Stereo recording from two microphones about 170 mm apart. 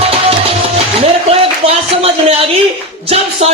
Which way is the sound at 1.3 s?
35° right (ahead or behind).